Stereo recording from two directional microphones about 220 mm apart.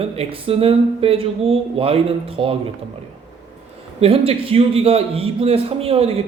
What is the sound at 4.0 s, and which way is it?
A man's voice, 25° right (ahead or behind).